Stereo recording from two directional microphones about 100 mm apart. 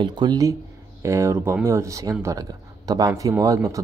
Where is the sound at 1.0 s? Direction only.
30° right (ahead or behind).